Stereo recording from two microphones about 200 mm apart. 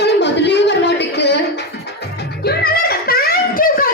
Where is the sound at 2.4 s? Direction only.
50° left (ahead or behind).